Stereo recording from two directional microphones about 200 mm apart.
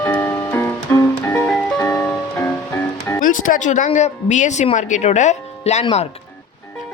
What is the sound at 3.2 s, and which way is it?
Speech, 40° left (ahead or behind).